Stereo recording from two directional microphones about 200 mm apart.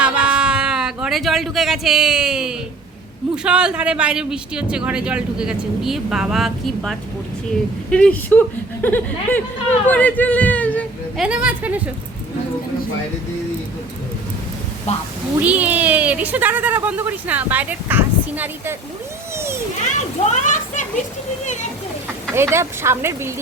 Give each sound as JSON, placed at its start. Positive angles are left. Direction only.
{"t": 0.0, "sound": "a sound", "side_deg": -5}
{"t": 3.3, "sound": "speech", "side_deg": -5}
{"t": 11.2, "sound": "speech", "side_deg": -5}
{"t": 14.9, "sound": "speech", "side_deg": 35}
{"t": 15.4, "sound": "speech", "side_deg": -5}
{"t": 20.3, "sound": "speech", "side_deg": 40}
{"t": 22.4, "sound": "speech", "side_deg": -10}